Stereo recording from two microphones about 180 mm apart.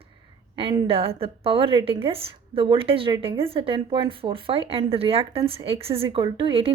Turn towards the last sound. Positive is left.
turn(degrees=-30)  # may be behind; listen again after turning